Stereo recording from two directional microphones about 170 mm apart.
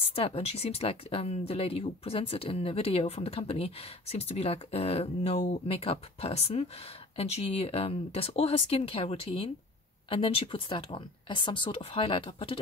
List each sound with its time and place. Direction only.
0.0 s speech: 35° left (ahead or behind)